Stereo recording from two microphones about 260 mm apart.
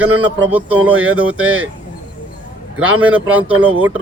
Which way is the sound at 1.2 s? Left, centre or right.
Right.